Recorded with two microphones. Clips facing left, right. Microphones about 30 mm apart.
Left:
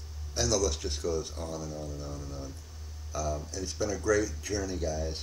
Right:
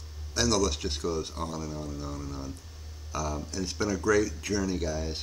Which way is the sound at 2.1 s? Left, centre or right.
Right.